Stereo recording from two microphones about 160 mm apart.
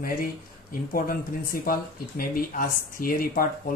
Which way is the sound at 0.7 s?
60° left (ahead or behind).